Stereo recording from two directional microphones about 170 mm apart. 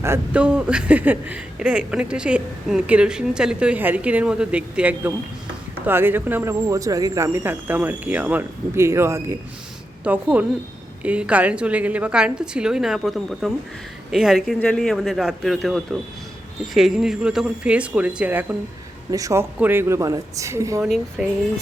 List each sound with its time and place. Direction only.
0.0 s a woman's voice: 10° right (ahead or behind)
20.8 s a woman's voice: centre (ahead or behind)